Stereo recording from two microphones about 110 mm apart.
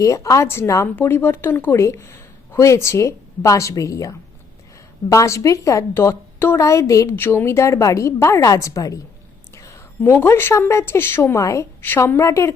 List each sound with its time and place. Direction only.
0.0 s speech: 30° left (ahead or behind)